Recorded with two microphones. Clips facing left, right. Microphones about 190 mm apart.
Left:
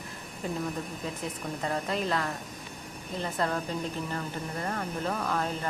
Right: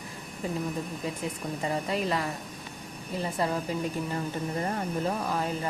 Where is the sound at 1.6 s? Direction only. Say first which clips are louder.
Right 1 dB; 5° right (ahead or behind).